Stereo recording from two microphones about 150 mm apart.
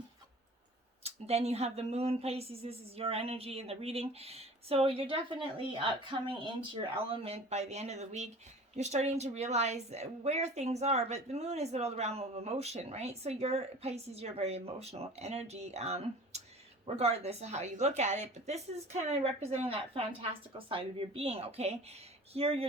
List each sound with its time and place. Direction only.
1.0 s a woman's voice: 45° right (ahead or behind)